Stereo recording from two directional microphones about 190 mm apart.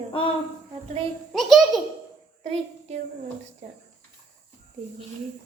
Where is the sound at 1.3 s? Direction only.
Centre (ahead or behind).